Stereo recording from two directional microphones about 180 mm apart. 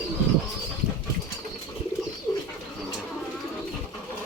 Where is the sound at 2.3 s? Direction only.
5° left (ahead or behind).